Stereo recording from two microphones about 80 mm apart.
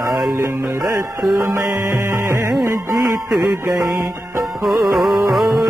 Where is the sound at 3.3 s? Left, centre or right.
Centre.